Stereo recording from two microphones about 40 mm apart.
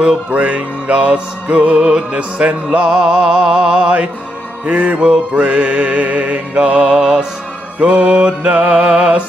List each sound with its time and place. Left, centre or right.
0.3 s music: right
2.9 s music: centre
6.9 s music: centre
7.9 s music: right
8.6 s music: right